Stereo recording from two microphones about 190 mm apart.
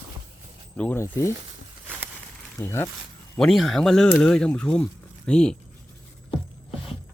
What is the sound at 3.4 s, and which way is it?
Speech, centre (ahead or behind).